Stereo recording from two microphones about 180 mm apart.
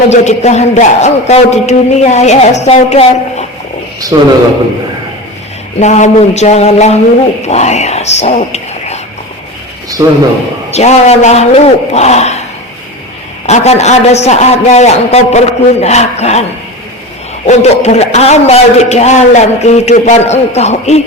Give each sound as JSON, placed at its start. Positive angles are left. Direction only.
{"t": 0.1, "sound": "a man's voice", "side_deg": 40}
{"t": 4.1, "sound": "a man's voice", "side_deg": -20}
{"t": 5.8, "sound": "a man's voice", "side_deg": 40}
{"t": 10.0, "sound": "a man's voice", "side_deg": -20}
{"t": 10.7, "sound": "a man's voice", "side_deg": 35}
{"t": 13.5, "sound": "a man's voice", "side_deg": 40}